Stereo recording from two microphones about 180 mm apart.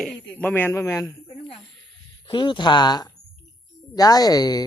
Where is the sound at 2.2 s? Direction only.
25° left (ahead or behind).